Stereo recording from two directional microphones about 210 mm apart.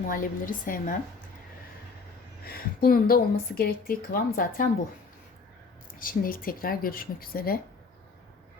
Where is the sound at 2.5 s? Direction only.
45° left (ahead or behind).